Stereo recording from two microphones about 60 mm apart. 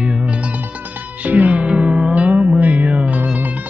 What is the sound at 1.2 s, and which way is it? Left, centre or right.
Music, right.